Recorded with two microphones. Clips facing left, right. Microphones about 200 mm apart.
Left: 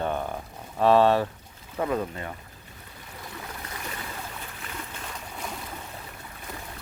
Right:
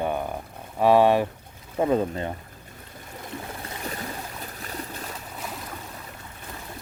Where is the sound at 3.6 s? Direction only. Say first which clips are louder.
Right 4 dB; 40° right (ahead or behind).